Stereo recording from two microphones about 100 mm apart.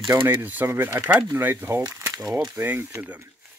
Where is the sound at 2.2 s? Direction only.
5° right (ahead or behind).